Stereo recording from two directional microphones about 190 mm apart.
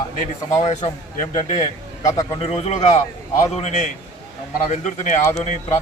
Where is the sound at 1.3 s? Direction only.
35° left (ahead or behind).